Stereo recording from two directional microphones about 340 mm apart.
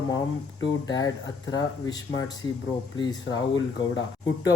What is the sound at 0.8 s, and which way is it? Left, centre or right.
Speech, centre.